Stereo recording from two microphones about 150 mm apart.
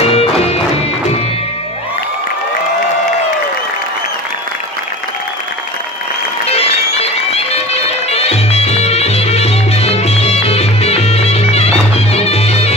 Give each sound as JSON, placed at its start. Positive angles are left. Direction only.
{"t": 0.1, "sound": "music", "side_deg": 45}
{"t": 6.5, "sound": "music", "side_deg": 40}